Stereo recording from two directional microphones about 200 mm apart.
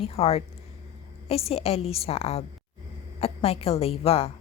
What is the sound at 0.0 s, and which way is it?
A woman's voice, 30° left (ahead or behind).